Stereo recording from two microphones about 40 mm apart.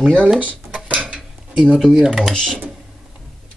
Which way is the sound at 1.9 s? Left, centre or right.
Centre.